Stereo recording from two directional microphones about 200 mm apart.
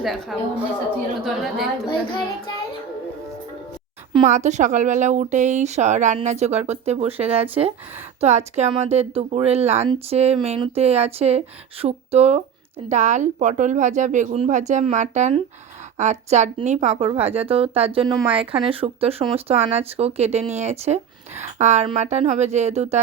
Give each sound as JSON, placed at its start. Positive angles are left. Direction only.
{"t": 0.0, "sound": "a woman's voice", "side_deg": 0}
{"t": 4.3, "sound": "speech", "side_deg": -35}